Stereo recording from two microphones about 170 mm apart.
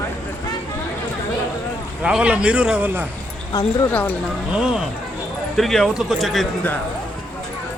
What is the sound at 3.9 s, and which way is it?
Speech, 10° left (ahead or behind).